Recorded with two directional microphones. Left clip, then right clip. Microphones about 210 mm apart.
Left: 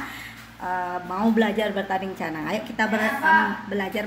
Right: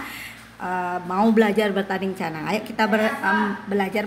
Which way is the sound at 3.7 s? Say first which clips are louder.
Right 4 dB; 45° right (ahead or behind).